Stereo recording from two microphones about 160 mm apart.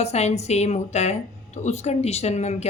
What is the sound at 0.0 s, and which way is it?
Speech, 45° left (ahead or behind).